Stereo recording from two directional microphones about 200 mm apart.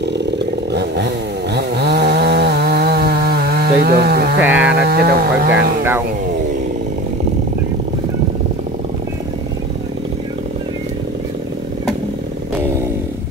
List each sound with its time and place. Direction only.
0.7 s chainsaw: 55° right (ahead or behind)
4.4 s a sound: 5° right (ahead or behind)
4.7 s speech: 50° right (ahead or behind)